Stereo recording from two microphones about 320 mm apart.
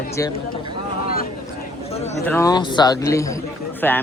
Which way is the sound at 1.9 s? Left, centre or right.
Centre.